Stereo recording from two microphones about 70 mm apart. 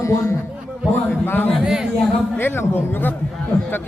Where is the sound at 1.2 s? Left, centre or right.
Left.